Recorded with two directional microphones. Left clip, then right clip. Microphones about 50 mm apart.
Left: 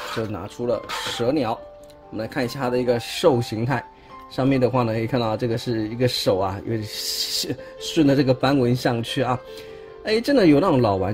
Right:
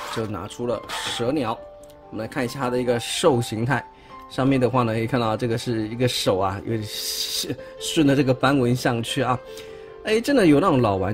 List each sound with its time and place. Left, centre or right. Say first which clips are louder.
0.1 s speech: even; right
0.7 s speech: left 1 dB; centre
2.1 s speech: left 1 dB; centre; by 6.9 s right
6.9 s speech: left 1 dB; centre